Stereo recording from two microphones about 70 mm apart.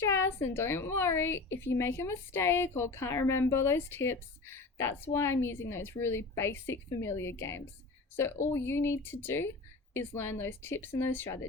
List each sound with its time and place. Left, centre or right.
0.0 s a woman's voice: left